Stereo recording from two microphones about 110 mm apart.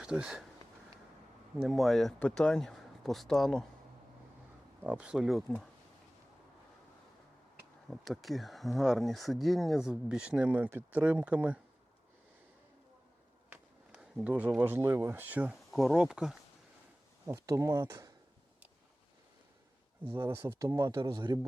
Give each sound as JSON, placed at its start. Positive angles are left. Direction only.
{"t": 0.0, "sound": "speech", "side_deg": -5}
{"t": 1.6, "sound": "speech", "side_deg": 0}
{"t": 4.8, "sound": "speech", "side_deg": -10}
{"t": 7.9, "sound": "speech", "side_deg": 0}
{"t": 13.9, "sound": "speech", "side_deg": -5}
{"t": 15.7, "sound": "speech", "side_deg": 0}
{"t": 17.2, "sound": "speech", "side_deg": -30}
{"t": 20.1, "sound": "speech", "side_deg": -20}
{"t": 21.0, "sound": "a man's voice", "side_deg": -40}